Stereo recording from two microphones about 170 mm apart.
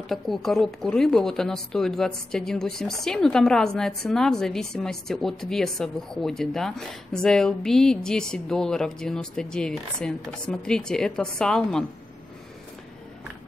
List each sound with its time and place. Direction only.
0.1 s a woman's voice: centre (ahead or behind)